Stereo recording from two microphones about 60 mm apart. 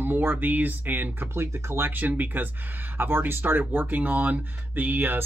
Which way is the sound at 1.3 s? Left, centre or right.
Right.